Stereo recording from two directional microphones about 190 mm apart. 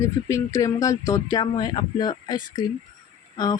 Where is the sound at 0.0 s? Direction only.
15° left (ahead or behind).